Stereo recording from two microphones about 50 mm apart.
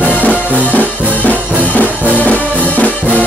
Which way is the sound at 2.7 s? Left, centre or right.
Left.